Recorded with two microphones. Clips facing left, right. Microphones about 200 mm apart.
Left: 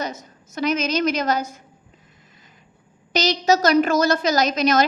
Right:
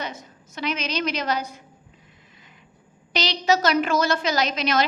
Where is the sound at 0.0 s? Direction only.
40° left (ahead or behind).